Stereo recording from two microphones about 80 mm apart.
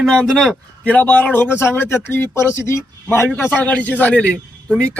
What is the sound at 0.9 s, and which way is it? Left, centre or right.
A man's voice, left.